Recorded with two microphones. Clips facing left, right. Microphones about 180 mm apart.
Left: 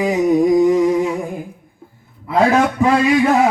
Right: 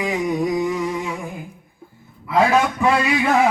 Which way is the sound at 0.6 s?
35° left (ahead or behind).